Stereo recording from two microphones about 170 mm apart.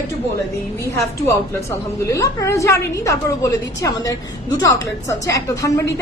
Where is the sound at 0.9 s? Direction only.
15° left (ahead or behind).